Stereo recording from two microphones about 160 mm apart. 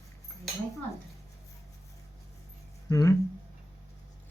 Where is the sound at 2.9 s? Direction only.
20° left (ahead or behind).